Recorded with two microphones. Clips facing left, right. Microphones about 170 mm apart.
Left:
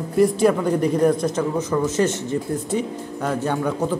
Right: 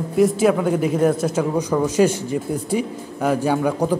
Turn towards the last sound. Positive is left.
turn(degrees=-10)  # may be behind; listen again after turning